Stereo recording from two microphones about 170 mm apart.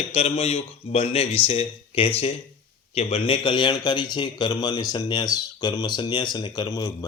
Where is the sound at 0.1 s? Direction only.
35° left (ahead or behind).